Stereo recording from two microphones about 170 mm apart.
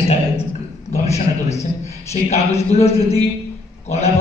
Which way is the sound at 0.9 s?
40° left (ahead or behind).